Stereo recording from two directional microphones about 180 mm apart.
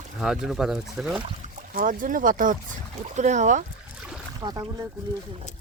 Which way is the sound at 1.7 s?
50° right (ahead or behind).